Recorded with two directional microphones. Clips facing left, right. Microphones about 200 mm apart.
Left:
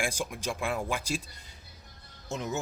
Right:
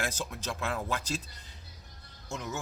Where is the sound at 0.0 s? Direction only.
10° left (ahead or behind).